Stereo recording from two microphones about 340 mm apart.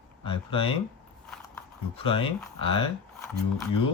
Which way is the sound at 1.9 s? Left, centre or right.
Centre.